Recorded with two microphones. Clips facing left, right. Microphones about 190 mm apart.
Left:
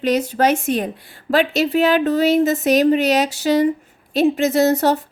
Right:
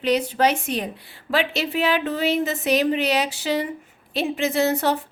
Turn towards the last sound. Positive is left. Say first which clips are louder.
# left 5 dB
turn(degrees=40)  # may be behind; listen again after turning